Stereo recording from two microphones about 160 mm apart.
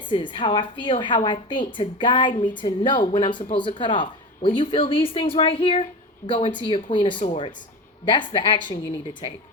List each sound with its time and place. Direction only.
0.1 s a woman's voice: 30° left (ahead or behind)